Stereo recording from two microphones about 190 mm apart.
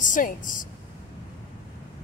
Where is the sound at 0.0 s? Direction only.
45° left (ahead or behind).